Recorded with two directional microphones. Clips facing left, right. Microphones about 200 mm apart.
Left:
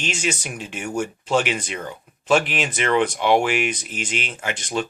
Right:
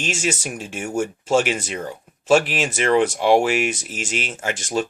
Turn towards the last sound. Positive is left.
turn(degrees=-45)  # may be behind; listen again after turning